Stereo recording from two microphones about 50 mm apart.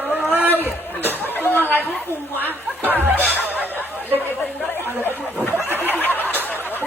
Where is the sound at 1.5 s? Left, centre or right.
Left.